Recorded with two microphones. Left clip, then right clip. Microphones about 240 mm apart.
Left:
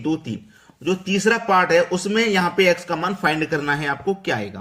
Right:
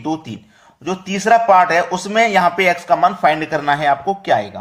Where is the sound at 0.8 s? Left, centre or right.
Centre.